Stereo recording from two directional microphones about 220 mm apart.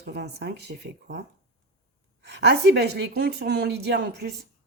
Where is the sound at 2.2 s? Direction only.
50° right (ahead or behind).